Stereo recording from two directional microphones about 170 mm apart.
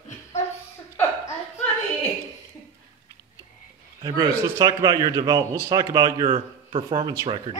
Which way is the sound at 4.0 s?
20° right (ahead or behind).